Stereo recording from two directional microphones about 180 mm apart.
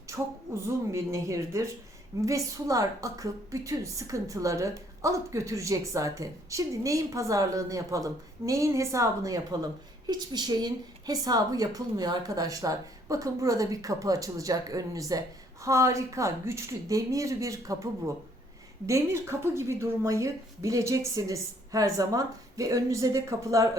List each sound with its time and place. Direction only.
0.1 s a woman's voice: 15° right (ahead or behind)